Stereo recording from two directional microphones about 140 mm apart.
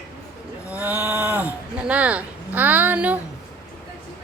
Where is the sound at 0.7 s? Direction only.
10° right (ahead or behind).